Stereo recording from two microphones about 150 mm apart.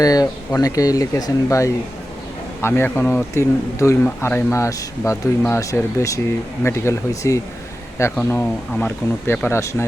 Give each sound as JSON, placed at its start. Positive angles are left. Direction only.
{"t": 0.0, "sound": "a man's voice", "side_deg": 25}